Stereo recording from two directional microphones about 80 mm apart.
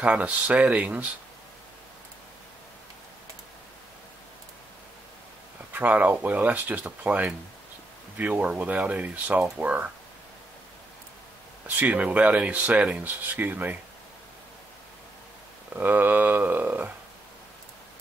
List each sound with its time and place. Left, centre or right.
0.0 s speech: centre
5.7 s speech: right
11.6 s speech: centre
15.7 s speech: right